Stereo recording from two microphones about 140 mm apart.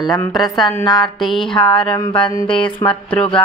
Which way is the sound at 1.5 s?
35° left (ahead or behind).